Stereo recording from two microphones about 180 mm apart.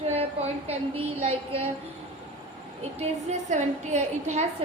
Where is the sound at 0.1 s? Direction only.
35° right (ahead or behind).